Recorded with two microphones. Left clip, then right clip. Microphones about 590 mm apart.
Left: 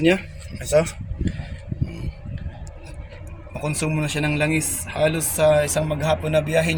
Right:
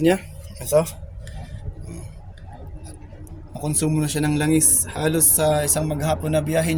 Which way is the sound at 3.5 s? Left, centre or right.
Right.